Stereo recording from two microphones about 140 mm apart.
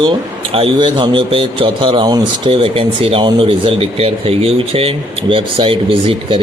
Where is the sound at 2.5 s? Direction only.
40° right (ahead or behind).